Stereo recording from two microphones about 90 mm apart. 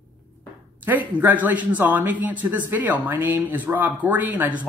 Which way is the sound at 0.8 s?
20° right (ahead or behind).